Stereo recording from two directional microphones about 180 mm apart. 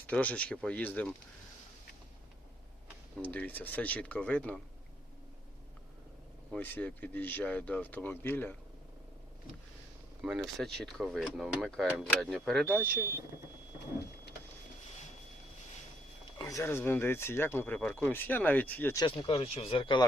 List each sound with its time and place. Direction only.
0.1 s speech: 5° left (ahead or behind)
3.2 s speech: 10° left (ahead or behind)
6.5 s speech: 10° left (ahead or behind)
10.2 s speech: centre (ahead or behind)
16.4 s speech: 20° left (ahead or behind)
19.0 s speech: 30° left (ahead or behind)